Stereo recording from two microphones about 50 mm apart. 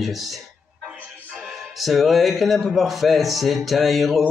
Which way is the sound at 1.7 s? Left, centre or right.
Centre.